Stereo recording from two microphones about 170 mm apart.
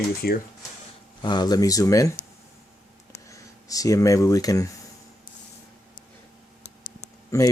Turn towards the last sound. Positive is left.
turn(degrees=20)  # may be behind; listen again after turning